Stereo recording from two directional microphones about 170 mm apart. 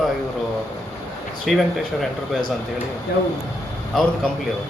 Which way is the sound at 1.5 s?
Centre (ahead or behind).